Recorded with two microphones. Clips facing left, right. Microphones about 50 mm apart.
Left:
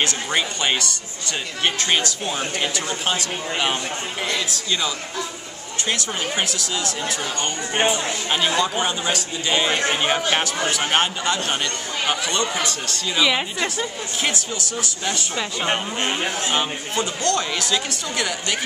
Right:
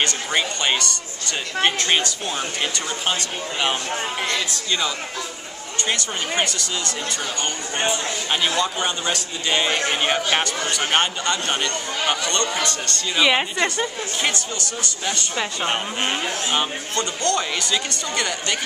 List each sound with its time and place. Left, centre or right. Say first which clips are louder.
0.0 s speech: even; centre
8.3 s speech: left 1 dB; centre
13.2 s a woman's voice: right 2 dB; centre
13.6 s speech: right 2 dB; centre
16.9 s a man's voice: left 1 dB; centre